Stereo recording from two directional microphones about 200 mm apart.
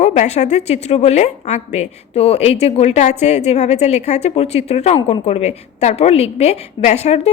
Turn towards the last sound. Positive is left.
turn(degrees=30)  # may be behind; listen again after turning